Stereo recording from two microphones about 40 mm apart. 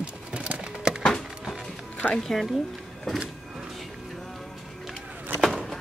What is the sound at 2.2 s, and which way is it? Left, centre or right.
Speech, centre.